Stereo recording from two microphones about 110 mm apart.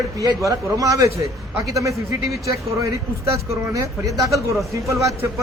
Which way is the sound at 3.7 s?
30° right (ahead or behind).